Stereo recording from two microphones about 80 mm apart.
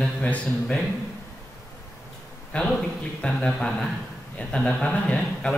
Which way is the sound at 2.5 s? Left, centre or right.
Centre.